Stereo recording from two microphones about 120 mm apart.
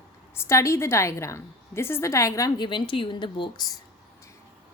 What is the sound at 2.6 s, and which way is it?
Speech, 40° left (ahead or behind).